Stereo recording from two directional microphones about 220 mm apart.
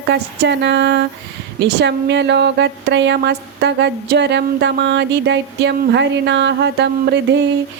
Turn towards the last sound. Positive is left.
turn(degrees=-50)  # may be behind; listen again after turning